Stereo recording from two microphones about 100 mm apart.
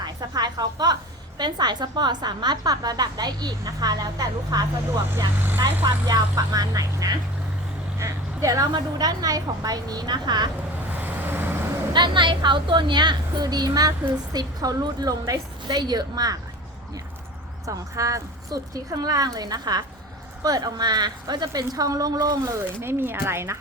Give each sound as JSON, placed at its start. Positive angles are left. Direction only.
{"t": 0.0, "sound": "a sound", "side_deg": -45}
{"t": 1.4, "sound": "a woman's voice", "side_deg": -45}
{"t": 5.1, "sound": "speech", "side_deg": -25}
{"t": 5.8, "sound": "a woman's voice", "side_deg": -40}
{"t": 11.0, "sound": "vehicle", "side_deg": -20}
{"t": 11.9, "sound": "a woman's voice", "side_deg": -50}
{"t": 17.7, "sound": "a woman's voice", "side_deg": -35}
{"t": 22.8, "sound": "speech", "side_deg": -25}